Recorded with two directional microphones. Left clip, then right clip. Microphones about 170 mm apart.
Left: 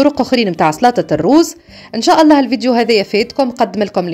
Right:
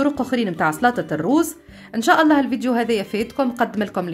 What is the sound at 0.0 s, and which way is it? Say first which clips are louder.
A woman's voice: left 9 dB; 40° left (ahead or behind).